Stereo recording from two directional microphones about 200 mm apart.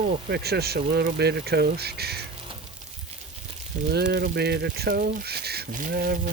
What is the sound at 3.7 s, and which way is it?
Speech, 40° right (ahead or behind).